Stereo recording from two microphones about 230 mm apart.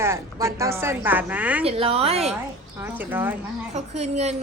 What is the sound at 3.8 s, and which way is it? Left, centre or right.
Speech, right.